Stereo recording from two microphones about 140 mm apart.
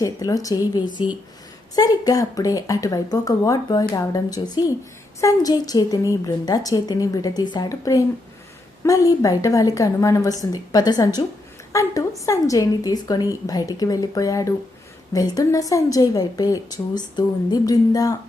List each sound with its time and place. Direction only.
0.0 s a woman's voice: 25° left (ahead or behind)
1.7 s a woman's voice: 25° left (ahead or behind)